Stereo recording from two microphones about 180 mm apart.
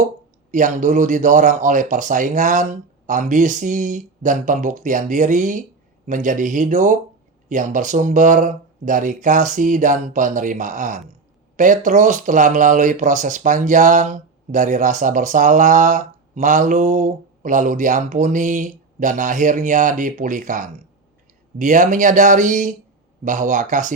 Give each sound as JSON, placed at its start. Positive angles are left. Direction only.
{"t": 0.5, "sound": "speech", "side_deg": -45}